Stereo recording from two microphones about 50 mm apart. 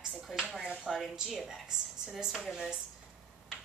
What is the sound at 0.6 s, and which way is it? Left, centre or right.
Speech, centre.